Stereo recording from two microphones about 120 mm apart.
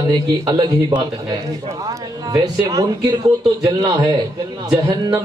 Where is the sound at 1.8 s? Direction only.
30° right (ahead or behind).